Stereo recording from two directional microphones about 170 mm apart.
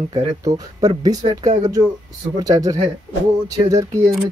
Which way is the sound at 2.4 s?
20° right (ahead or behind).